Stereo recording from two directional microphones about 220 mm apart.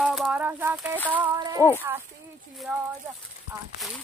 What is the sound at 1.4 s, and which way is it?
Speech, 15° right (ahead or behind).